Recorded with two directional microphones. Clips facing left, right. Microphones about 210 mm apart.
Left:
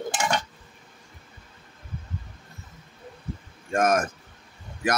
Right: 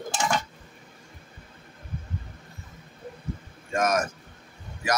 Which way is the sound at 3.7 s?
50° left (ahead or behind).